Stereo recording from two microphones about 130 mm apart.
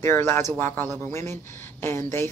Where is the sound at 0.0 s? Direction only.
20° left (ahead or behind).